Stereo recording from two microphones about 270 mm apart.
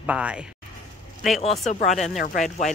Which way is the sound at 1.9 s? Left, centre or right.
Centre.